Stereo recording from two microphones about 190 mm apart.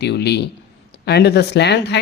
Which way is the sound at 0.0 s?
60° left (ahead or behind).